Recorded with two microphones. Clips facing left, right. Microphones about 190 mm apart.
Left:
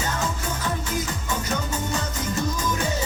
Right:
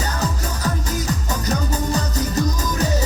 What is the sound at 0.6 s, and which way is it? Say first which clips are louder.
Music: right 4 dB; 40° right (ahead or behind).